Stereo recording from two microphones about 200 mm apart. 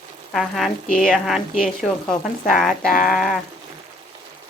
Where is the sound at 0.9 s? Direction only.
45° left (ahead or behind).